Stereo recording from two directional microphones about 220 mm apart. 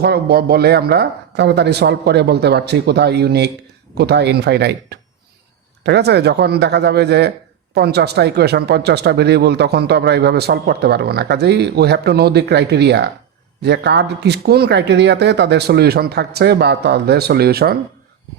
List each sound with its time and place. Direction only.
0.0 s speech: 45° right (ahead or behind)